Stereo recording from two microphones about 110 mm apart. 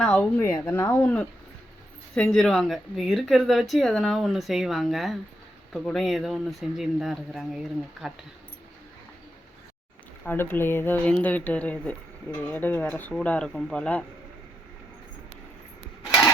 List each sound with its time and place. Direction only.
0.0 s speech: 10° left (ahead or behind)
0.3 s speech: 20° left (ahead or behind); by 8.1 s 5° right (ahead or behind)
10.2 s speech: 20° left (ahead or behind)